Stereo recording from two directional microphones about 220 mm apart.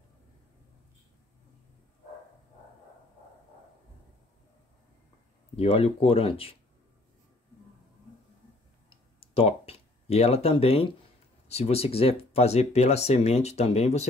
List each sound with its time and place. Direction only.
5.6 s speech: 25° left (ahead or behind)
8.9 s a sound: 25° left (ahead or behind)
11.4 s speech: 30° left (ahead or behind)